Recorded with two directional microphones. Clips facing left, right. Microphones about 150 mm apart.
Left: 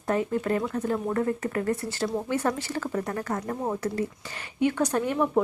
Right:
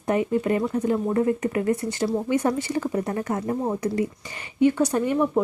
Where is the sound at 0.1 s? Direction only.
5° right (ahead or behind).